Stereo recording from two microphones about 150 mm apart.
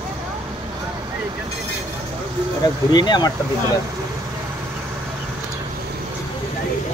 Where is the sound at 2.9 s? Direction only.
30° left (ahead or behind).